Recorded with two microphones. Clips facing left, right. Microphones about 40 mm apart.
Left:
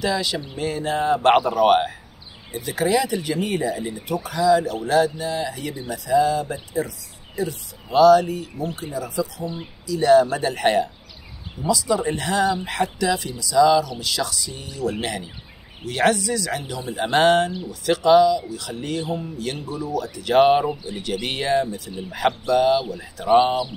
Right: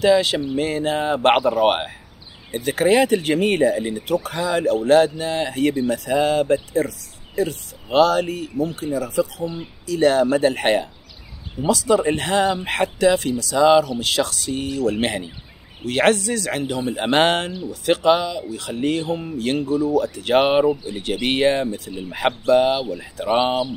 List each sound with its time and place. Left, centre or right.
0.0 s speech: right
1.3 s speech: centre
2.5 s speech: right
3.2 s speech: right
4.3 s speech: right
6.4 s speech: right
8.5 s speech: left
8.9 s speech: right
11.6 s speech: right
11.9 s speech: right
20.3 s speech: right
22.5 s speech: right
23.2 s speech: right